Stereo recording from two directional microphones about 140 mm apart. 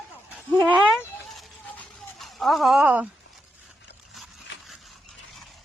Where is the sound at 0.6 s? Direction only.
10° right (ahead or behind).